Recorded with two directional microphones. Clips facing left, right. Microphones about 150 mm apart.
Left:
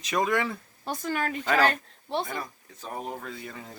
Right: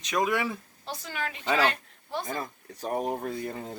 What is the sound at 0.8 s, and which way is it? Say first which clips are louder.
Speech: left 6 dB; 50° left (ahead or behind).